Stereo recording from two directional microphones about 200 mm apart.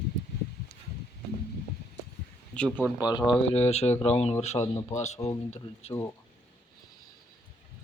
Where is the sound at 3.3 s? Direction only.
30° left (ahead or behind).